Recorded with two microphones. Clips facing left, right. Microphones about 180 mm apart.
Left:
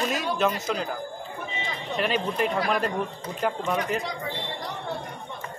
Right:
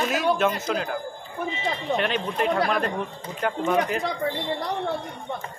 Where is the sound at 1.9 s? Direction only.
Centre (ahead or behind).